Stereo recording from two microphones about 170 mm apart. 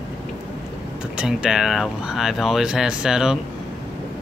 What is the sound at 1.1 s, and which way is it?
Speech, 5° right (ahead or behind).